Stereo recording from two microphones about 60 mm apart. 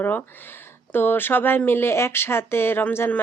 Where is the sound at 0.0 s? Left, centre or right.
Left.